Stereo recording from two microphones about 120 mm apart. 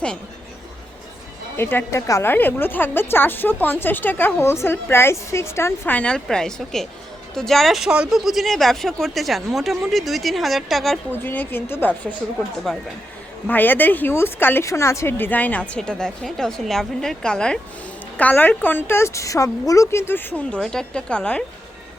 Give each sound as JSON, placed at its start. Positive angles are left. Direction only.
{"t": 1.5, "sound": "a woman's voice", "side_deg": 20}
{"t": 11.2, "sound": "a woman's voice", "side_deg": 15}
{"t": 12.7, "sound": "speech", "side_deg": 5}
{"t": 13.5, "sound": "a woman's voice", "side_deg": 15}